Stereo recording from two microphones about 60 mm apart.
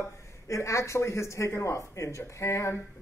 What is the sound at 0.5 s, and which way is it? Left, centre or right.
Speech, left.